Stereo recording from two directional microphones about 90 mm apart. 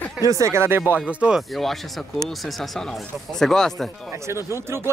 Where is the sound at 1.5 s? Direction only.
Centre (ahead or behind).